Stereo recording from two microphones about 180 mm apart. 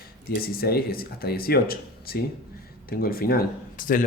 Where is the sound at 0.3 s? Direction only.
55° left (ahead or behind).